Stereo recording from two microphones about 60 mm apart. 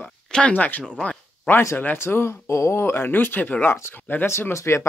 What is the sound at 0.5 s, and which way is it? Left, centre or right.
Speech, left.